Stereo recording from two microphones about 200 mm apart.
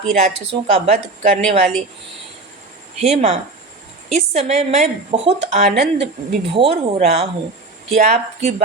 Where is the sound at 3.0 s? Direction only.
35° right (ahead or behind).